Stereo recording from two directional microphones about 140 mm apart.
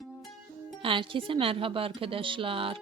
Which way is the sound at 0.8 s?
40° right (ahead or behind).